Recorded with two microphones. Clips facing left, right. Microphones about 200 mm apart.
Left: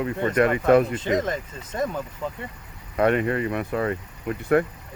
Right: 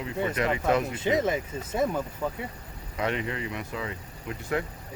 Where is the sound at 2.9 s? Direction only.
55° left (ahead or behind).